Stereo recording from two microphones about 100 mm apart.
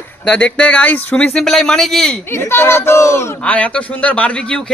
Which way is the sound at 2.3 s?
25° left (ahead or behind).